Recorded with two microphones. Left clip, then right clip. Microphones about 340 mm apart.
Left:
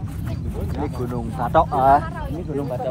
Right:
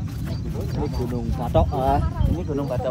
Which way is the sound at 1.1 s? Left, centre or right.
Left.